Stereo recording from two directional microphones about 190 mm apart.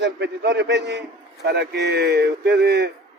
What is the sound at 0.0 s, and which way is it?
Speech, 70° right (ahead or behind).